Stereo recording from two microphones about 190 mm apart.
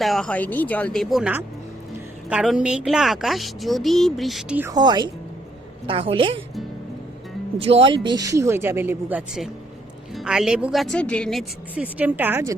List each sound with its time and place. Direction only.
0.0 s a woman's voice: centre (ahead or behind)
4.7 s a woman's voice: 20° right (ahead or behind)
7.6 s a woman's voice: 30° right (ahead or behind); by 12.5 s 10° right (ahead or behind)